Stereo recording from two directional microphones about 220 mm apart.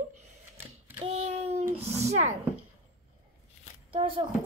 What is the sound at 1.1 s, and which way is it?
Speech, 35° right (ahead or behind).